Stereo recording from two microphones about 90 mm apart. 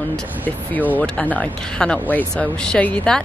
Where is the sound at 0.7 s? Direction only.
20° left (ahead or behind).